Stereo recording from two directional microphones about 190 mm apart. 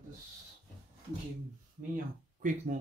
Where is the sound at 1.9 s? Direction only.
45° right (ahead or behind).